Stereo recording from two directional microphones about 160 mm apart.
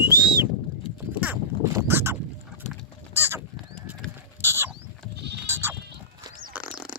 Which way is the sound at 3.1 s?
15° right (ahead or behind).